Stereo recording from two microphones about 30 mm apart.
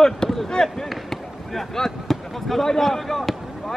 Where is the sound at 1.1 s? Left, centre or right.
Centre.